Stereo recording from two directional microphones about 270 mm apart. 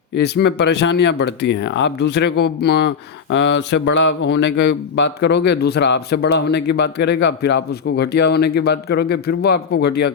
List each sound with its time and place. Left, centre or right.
0.2 s speech: left